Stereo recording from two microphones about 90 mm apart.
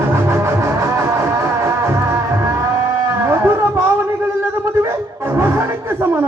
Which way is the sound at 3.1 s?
30° right (ahead or behind).